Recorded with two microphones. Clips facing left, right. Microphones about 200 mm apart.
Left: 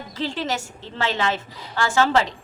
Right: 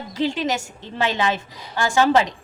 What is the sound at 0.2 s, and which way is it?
A woman's voice, 15° right (ahead or behind).